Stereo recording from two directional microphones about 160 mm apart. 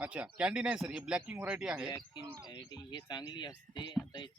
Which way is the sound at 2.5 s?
25° left (ahead or behind).